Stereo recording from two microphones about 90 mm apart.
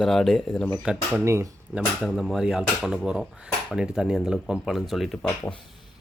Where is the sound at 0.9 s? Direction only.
10° right (ahead or behind).